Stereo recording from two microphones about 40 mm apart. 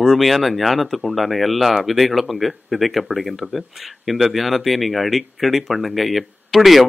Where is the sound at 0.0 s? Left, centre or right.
Centre.